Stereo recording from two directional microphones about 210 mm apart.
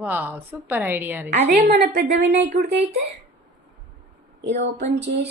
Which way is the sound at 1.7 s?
45° right (ahead or behind).